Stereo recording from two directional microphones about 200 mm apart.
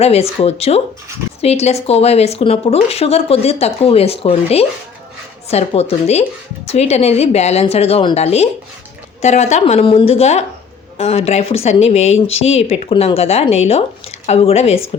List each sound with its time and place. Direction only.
0.0 s speech: 30° left (ahead or behind)